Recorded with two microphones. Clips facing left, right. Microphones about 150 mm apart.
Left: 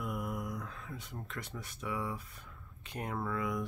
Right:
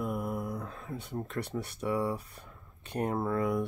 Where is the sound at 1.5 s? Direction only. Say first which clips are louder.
Right 7 dB; 35° right (ahead or behind).